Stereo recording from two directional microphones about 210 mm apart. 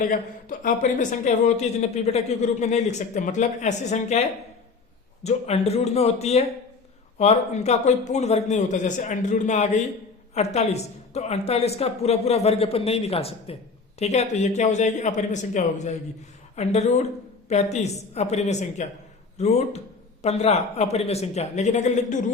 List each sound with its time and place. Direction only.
0.6 s a woman's voice: 35° left (ahead or behind)